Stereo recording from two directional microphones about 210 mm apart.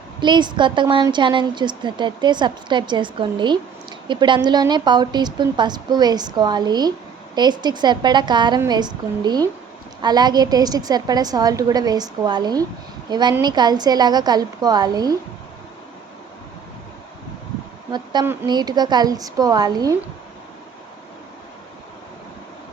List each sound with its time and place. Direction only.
0.2 s a woman's voice: 20° right (ahead or behind)
17.9 s a woman's voice: 20° right (ahead or behind)